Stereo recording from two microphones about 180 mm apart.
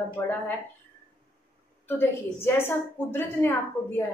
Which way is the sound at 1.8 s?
10° left (ahead or behind).